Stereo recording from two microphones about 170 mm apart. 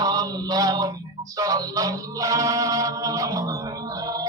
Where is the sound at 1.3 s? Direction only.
20° right (ahead or behind).